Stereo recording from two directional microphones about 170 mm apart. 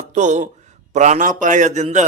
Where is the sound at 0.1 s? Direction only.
45° right (ahead or behind).